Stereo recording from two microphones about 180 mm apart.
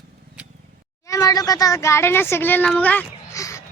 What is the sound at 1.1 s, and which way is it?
Speech, 20° left (ahead or behind).